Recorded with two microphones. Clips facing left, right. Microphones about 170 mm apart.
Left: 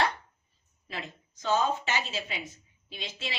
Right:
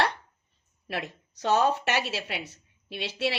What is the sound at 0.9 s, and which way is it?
A woman's voice, 70° right (ahead or behind).